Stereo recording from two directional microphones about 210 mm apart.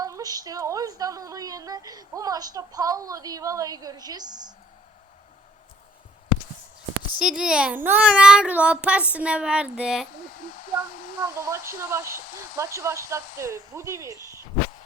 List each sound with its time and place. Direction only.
0.0 s a woman's voice: 15° right (ahead or behind)
7.2 s a child's voice: 5° right (ahead or behind)
10.4 s speech: 40° left (ahead or behind)
11.3 s a woman's voice: 15° right (ahead or behind)